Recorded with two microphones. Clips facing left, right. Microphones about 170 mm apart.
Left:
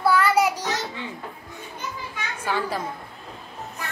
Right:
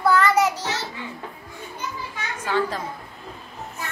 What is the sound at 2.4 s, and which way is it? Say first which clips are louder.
Speech: right 2 dB; 10° left (ahead or behind).